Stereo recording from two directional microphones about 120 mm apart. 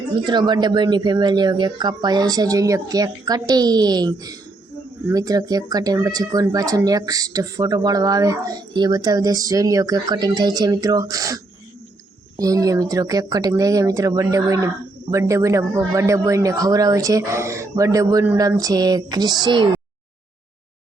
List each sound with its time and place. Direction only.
0.3 s speech: 35° right (ahead or behind)
12.4 s a man's voice: 30° right (ahead or behind)